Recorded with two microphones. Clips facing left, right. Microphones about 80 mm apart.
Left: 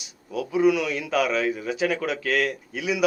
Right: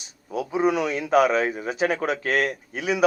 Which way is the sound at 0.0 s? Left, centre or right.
Right.